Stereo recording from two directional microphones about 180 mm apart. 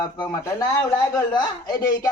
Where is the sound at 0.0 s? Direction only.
20° left (ahead or behind).